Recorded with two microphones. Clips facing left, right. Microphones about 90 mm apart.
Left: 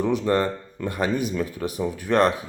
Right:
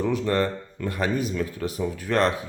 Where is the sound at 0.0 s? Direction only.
15° left (ahead or behind).